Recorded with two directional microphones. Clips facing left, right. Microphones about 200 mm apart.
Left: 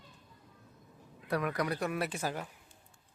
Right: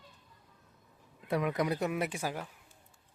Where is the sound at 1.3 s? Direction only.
20° right (ahead or behind).